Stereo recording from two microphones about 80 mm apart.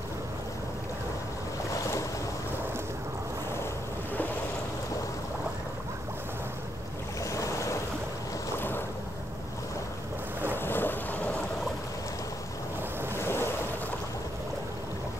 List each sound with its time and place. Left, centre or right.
1.7 s boat: left
7.2 s boat: left
8.5 s boat: left
10.5 s boat: left
13.2 s waves: left